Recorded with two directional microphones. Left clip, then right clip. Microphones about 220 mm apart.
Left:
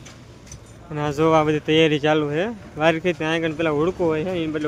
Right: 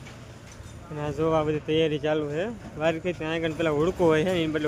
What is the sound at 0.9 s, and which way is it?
Speech, 20° left (ahead or behind).